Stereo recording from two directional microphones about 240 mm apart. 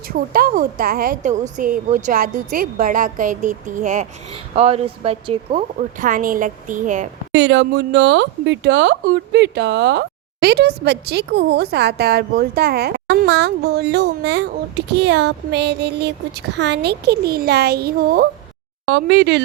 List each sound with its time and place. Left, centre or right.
0.1 s a woman's voice: right
7.3 s speech: right